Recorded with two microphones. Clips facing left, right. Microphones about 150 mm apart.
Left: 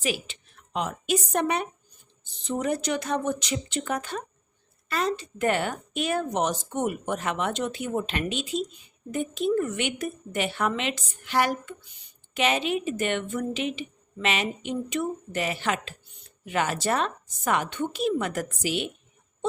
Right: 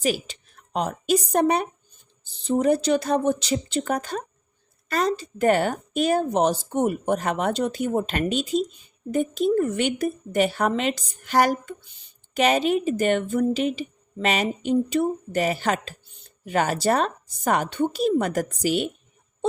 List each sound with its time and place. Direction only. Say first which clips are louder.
0.0 s a woman's voice: right 5 dB; 40° right (ahead or behind)